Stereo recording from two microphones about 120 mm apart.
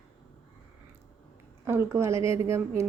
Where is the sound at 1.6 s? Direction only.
20° right (ahead or behind).